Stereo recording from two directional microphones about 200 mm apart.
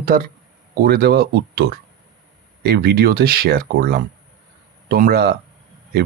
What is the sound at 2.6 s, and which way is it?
Speech, 55° right (ahead or behind).